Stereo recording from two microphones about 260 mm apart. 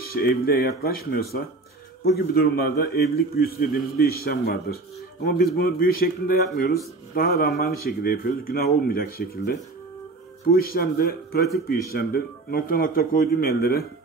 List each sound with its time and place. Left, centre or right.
0.1 s a man's voice: left